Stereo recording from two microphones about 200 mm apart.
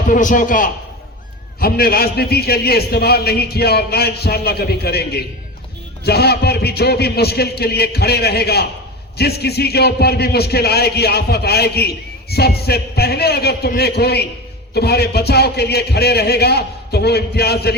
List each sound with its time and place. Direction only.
0.1 s a man's voice: 40° left (ahead or behind)